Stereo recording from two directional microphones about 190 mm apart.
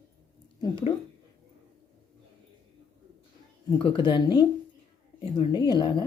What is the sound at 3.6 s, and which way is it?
Speech, 25° left (ahead or behind).